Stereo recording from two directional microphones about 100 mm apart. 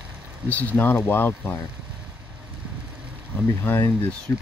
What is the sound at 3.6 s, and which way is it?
Speech, 20° left (ahead or behind).